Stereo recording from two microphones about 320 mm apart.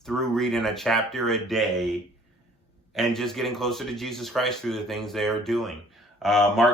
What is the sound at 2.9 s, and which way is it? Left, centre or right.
Speech, centre.